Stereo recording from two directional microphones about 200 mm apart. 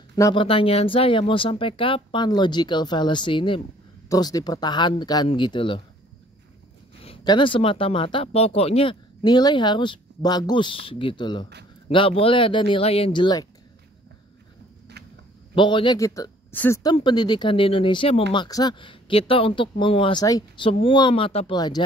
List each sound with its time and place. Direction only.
0.1 s speech: 20° left (ahead or behind)
7.0 s speech: 25° left (ahead or behind)
15.5 s a woman's voice: 25° left (ahead or behind)